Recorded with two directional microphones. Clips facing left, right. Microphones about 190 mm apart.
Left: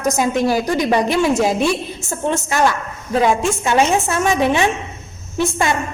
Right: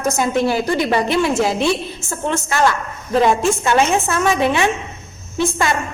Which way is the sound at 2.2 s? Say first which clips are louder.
Left 1 dB; 15° left (ahead or behind).